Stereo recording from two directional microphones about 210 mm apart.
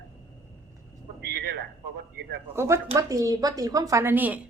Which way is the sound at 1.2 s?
50° right (ahead or behind).